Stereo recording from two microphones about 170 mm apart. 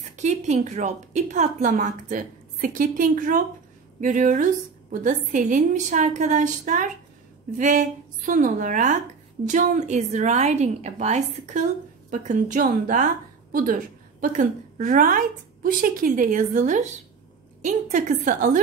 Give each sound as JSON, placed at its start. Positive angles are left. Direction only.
{"t": 0.1, "sound": "a woman's voice", "side_deg": -45}